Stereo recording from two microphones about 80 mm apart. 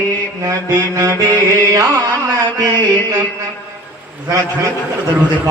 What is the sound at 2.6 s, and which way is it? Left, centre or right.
Mantra, right.